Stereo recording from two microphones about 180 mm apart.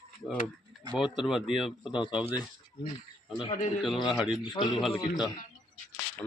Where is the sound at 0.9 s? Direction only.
5° right (ahead or behind).